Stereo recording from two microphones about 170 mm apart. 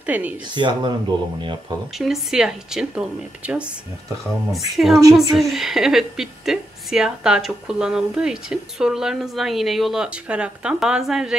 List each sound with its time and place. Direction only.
0.0 s speech: 10° right (ahead or behind)
0.6 s speech: 25° right (ahead or behind)
2.0 s a woman's voice: 5° right (ahead or behind)